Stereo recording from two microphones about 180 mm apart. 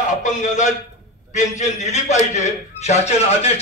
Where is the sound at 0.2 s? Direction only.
45° left (ahead or behind).